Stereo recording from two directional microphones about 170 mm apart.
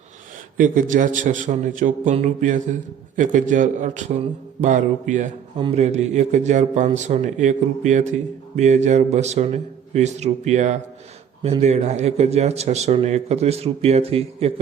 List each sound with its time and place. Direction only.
0.5 s a man's voice: 50° right (ahead or behind)
5.5 s a man's voice: 30° right (ahead or behind)
5.8 s a man's voice: 40° right (ahead or behind)